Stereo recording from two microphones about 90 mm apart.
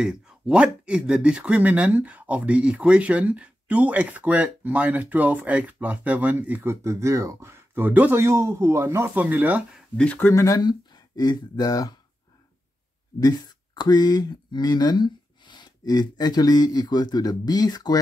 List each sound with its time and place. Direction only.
0.0 s speech: 10° right (ahead or behind)
6.7 s speech: 30° right (ahead or behind)
10.1 s speech: 30° left (ahead or behind)
10.6 s speech: 50° left (ahead or behind)
13.2 s speech: 50° left (ahead or behind)